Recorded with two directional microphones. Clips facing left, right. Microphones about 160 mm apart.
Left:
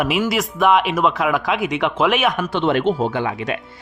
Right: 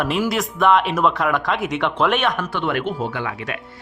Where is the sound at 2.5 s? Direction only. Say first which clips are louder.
Left 5 dB; 25° left (ahead or behind).